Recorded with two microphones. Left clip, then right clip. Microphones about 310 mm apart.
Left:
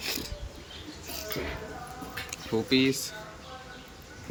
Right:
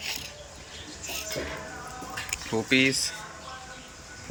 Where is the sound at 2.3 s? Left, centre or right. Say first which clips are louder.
Right 2 dB; centre.